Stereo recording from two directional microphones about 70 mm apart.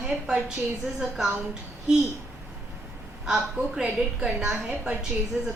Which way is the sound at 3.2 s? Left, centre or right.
Centre.